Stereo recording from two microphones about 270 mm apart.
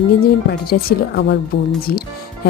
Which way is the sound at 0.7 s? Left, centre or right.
Left.